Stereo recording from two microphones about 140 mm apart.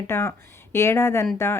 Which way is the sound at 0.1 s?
20° left (ahead or behind).